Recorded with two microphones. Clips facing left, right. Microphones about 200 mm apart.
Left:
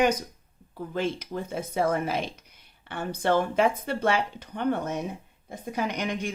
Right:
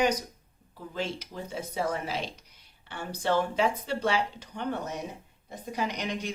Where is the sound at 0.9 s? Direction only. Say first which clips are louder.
Left 5 dB; 55° left (ahead or behind).